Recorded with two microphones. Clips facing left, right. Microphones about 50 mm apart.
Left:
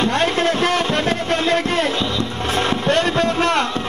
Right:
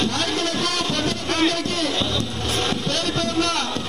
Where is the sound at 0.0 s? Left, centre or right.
Left.